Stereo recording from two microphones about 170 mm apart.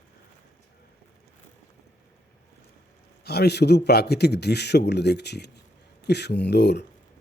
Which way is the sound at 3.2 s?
70° left (ahead or behind).